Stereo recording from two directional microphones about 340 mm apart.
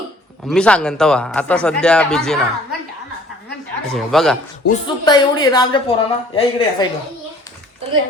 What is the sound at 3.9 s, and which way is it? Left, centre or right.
Speech, centre.